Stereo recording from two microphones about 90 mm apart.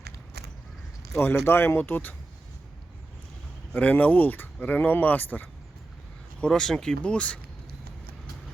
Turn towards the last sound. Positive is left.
turn(degrees=10)  # may be behind; listen again after turning